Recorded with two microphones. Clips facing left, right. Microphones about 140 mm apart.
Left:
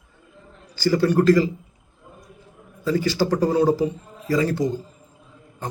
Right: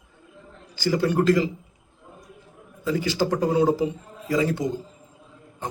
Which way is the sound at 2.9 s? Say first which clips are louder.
Left 3 dB; 20° right (ahead or behind).